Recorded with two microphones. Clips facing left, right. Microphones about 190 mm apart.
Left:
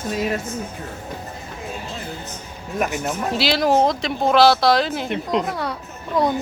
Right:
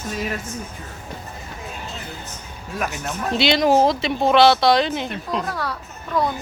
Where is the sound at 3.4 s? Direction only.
Centre (ahead or behind).